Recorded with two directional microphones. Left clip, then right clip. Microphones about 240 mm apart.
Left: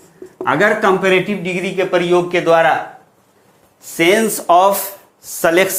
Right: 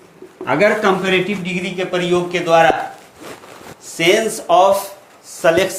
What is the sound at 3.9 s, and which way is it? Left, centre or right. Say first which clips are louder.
Speech: left 1 dB; left.